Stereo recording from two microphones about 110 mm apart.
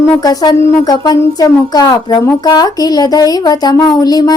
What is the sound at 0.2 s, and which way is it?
Speech, 35° left (ahead or behind).